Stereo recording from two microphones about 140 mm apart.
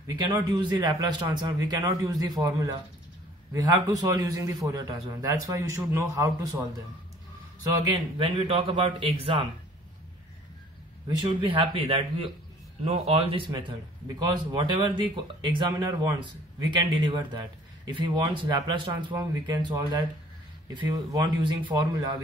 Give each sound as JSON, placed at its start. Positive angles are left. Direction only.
{"t": 0.0, "sound": "speech", "side_deg": -30}
{"t": 7.8, "sound": "a man's voice", "side_deg": -35}
{"t": 11.1, "sound": "a man's voice", "side_deg": -40}